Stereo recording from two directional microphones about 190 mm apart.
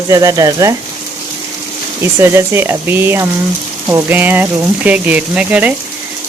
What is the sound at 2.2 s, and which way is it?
Speech, 15° right (ahead or behind).